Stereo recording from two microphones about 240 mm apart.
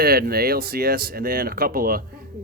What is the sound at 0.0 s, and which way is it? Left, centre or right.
Speech, right.